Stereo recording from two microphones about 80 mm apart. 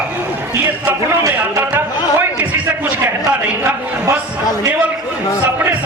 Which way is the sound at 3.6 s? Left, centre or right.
Right.